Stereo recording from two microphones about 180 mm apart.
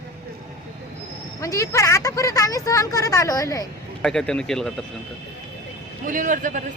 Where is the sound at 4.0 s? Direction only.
5° left (ahead or behind).